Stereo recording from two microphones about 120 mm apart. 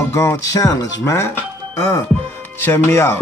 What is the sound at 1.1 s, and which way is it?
Speech, 20° left (ahead or behind).